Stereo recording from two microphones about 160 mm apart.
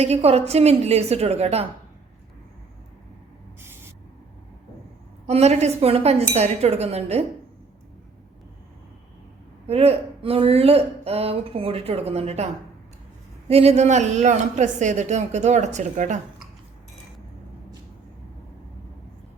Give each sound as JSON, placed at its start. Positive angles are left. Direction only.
{"t": 0.0, "sound": "speech", "side_deg": -40}
{"t": 5.2, "sound": "speech", "side_deg": -45}
{"t": 9.6, "sound": "speech", "side_deg": -40}
{"t": 13.5, "sound": "speech", "side_deg": -40}